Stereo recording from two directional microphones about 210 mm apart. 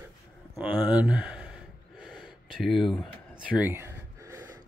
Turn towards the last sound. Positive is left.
turn(degrees=-15)  # may be behind; listen again after turning